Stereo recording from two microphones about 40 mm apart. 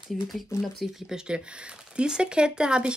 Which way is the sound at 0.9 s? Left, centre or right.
Centre.